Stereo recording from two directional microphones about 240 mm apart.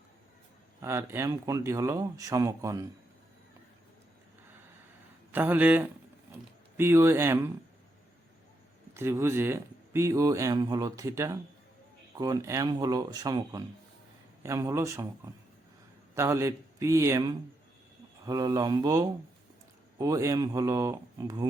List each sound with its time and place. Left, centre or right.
0.8 s speech: centre
5.3 s speech: centre
9.0 s speech: centre
16.1 s speech: centre